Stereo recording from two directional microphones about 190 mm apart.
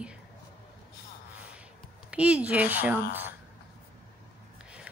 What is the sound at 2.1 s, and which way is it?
Speech, 5° right (ahead or behind).